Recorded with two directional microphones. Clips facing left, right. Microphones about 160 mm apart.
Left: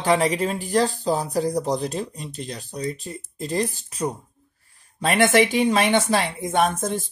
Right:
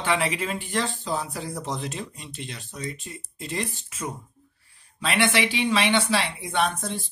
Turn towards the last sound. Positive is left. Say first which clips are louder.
# left 5 dB
turn(degrees=45)  # may be behind; listen again after turning